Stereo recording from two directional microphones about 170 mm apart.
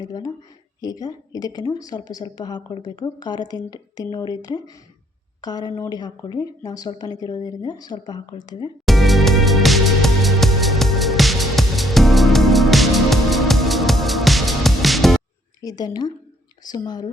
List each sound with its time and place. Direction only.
0.0 s speech: 20° left (ahead or behind)
8.9 s music: centre (ahead or behind)
15.6 s speech: 25° left (ahead or behind)